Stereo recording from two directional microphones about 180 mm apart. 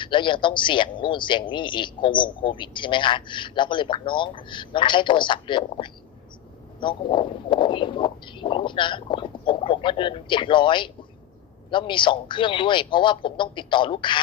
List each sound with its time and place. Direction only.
0.0 s speech: 25° left (ahead or behind)